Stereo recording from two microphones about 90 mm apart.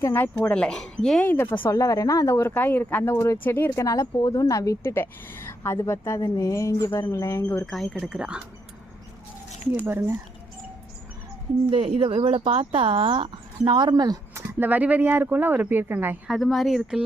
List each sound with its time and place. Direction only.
0.0 s speech: 30° left (ahead or behind)
0.5 s speech: 10° left (ahead or behind)
1.2 s speech: 20° left (ahead or behind)
1.7 s a woman's voice: 40° left (ahead or behind)
2.3 s speech: 25° left (ahead or behind)
3.8 s a woman's voice: 35° left (ahead or behind)
7.7 s speech: centre (ahead or behind)
8.0 s speech: 10° right (ahead or behind)
9.7 s speech: 30° right (ahead or behind)
11.7 s speech: 90° right
13.7 s speech: 55° right (ahead or behind)
14.3 s speech: 20° right (ahead or behind)
16.4 s speech: centre (ahead or behind)